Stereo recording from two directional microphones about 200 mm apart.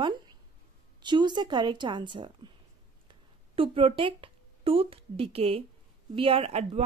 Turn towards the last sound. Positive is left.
turn(degrees=-30)  # may be behind; listen again after turning